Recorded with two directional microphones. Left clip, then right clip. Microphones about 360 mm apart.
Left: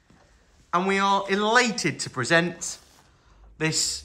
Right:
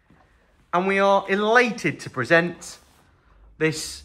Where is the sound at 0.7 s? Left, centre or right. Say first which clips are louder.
Right 3 dB; centre.